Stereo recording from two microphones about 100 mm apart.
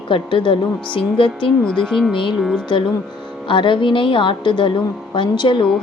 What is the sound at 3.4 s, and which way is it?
A woman's voice, 55° left (ahead or behind).